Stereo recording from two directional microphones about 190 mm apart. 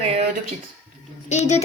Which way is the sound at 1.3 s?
40° left (ahead or behind).